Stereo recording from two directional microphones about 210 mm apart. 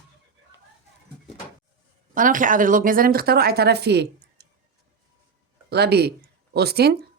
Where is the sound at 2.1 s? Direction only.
40° right (ahead or behind).